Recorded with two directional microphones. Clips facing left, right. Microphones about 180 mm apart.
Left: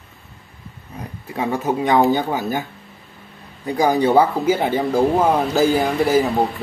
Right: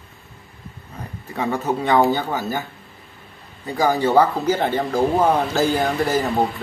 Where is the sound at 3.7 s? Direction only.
15° left (ahead or behind).